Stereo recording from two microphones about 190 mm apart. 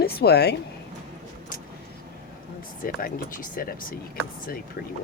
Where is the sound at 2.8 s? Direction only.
45° left (ahead or behind).